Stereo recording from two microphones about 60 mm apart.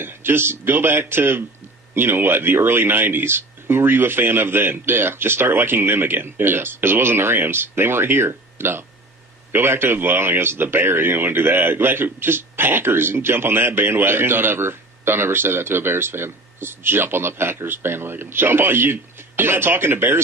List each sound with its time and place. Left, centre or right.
0.0 s speech: right